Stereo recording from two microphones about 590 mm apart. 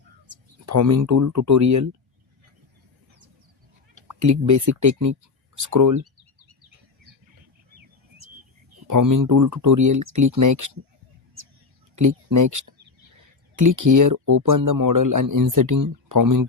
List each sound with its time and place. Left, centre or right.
0.6 s speech: right
4.1 s speech: right
6.0 s bird: right
8.9 s speech: right
11.9 s speech: right